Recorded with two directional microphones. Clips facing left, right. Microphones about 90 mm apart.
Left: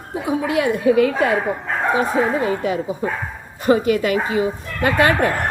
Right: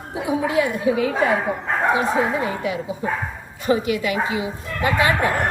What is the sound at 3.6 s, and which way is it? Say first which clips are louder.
Speech: left 4 dB; 45° left (ahead or behind).